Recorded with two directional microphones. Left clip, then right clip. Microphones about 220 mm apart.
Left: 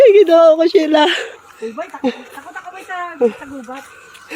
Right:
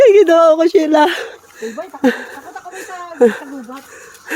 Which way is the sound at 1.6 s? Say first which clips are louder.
Right 4 dB; 25° right (ahead or behind).